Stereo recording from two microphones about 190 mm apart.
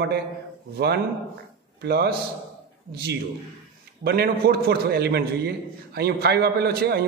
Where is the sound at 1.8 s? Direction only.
60° right (ahead or behind).